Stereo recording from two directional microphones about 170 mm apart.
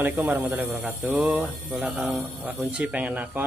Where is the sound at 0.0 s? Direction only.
10° right (ahead or behind).